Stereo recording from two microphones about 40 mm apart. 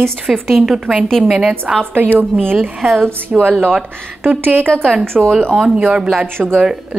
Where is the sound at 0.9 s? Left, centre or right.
Centre.